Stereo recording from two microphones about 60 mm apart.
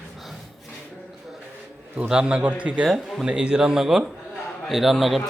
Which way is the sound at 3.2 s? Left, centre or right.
Centre.